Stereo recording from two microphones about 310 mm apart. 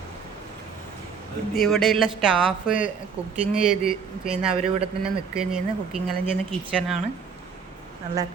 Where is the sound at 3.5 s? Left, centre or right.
Centre.